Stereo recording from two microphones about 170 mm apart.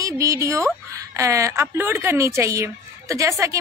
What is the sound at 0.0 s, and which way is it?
Speech, 20° right (ahead or behind).